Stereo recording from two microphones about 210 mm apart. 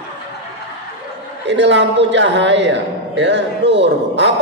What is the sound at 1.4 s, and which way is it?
Speech, 55° right (ahead or behind).